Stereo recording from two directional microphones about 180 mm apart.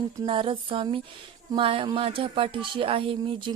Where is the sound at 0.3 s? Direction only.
30° right (ahead or behind).